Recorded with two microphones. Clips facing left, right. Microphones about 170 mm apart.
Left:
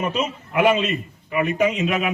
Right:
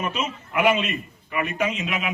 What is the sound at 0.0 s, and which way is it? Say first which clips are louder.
A man's voice: left 4 dB; 35° left (ahead or behind).